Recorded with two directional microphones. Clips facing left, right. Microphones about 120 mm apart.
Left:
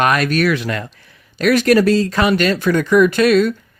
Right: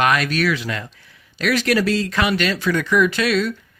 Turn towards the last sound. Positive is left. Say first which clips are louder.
# left 6 dB
turn(degrees=50)  # may be behind; listen again after turning